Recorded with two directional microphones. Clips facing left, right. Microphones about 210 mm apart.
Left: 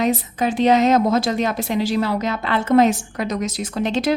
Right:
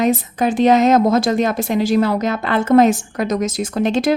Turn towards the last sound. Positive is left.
turn(degrees=-50)  # may be behind; listen again after turning